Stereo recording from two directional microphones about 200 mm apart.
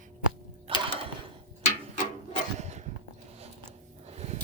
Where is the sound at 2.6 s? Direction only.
35° right (ahead or behind).